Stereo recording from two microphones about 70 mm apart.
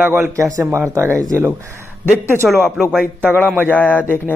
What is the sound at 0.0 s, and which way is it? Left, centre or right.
Speech, right.